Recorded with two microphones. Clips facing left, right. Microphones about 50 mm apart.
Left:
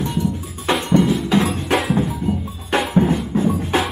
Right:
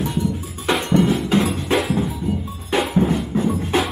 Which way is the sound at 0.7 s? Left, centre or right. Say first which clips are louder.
Left 1 dB; centre.